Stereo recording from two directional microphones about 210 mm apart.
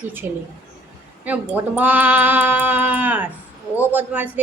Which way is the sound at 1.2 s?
10° right (ahead or behind).